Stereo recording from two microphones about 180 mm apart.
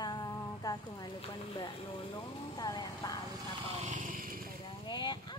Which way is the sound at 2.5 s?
20° left (ahead or behind).